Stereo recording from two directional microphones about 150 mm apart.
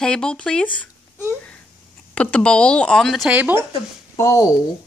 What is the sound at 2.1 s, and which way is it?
Speech, 10° left (ahead or behind).